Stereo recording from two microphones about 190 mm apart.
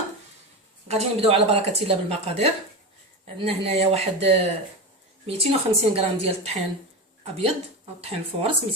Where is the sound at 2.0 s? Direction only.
35° right (ahead or behind).